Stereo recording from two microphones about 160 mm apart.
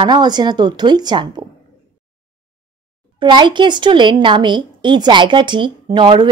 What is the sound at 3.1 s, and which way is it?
A woman's voice, 30° right (ahead or behind).